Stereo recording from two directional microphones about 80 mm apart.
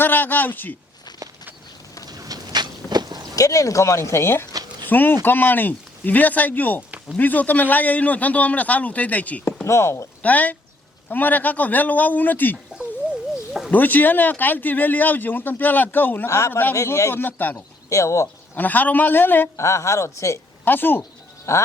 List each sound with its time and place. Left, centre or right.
0.0 s a man's voice: left
2.0 s a sound: right
3.3 s speech: left
4.9 s speech: left
9.6 s speech: left
10.2 s speech: centre
13.7 s speech: left
16.7 s speech: left
17.8 s speech: left
18.5 s speech: left
19.5 s speech: left
20.7 s speech: left
21.5 s speech: left